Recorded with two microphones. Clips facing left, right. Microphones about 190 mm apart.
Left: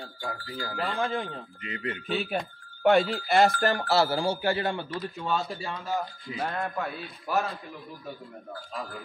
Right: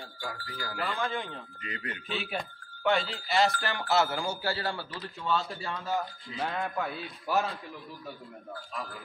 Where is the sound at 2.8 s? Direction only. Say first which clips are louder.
Left 7 dB; 55° left (ahead or behind); by 4.2 s 35° left (ahead or behind).